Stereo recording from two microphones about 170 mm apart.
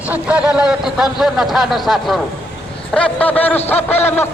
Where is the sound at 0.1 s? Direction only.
5° right (ahead or behind).